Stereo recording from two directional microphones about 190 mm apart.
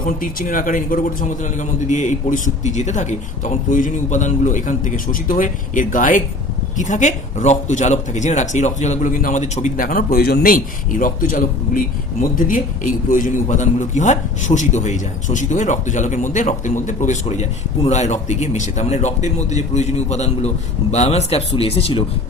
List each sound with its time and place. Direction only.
0.0 s a man's voice: 45° left (ahead or behind); by 22.0 s 30° left (ahead or behind)